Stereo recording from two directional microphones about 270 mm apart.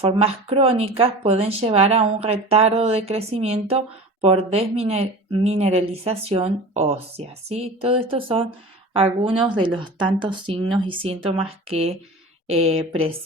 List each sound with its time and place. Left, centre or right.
0.0 s speech: right